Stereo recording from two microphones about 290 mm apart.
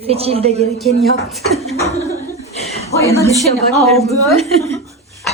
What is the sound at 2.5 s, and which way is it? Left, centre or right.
Chuckle, left.